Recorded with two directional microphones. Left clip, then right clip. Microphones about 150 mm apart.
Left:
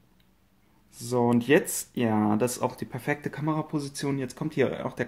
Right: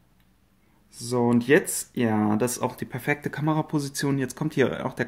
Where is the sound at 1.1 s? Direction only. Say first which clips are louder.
Right 2 dB; 10° right (ahead or behind).